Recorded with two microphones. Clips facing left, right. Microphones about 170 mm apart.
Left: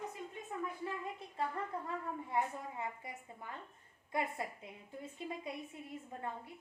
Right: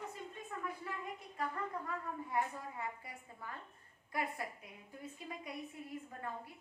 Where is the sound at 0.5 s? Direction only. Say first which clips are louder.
Left 3 dB; 15° left (ahead or behind).